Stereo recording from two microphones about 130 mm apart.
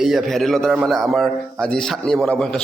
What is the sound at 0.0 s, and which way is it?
A man's voice, centre (ahead or behind).